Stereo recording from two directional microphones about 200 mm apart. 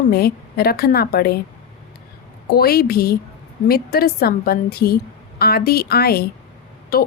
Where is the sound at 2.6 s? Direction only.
50° left (ahead or behind).